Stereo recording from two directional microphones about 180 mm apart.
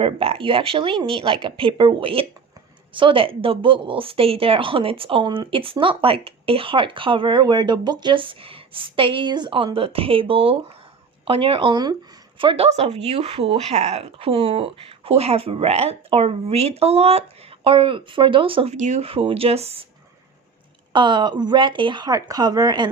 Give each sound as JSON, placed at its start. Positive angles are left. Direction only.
{"t": 0.0, "sound": "speech", "side_deg": -30}
{"t": 20.9, "sound": "speech", "side_deg": -25}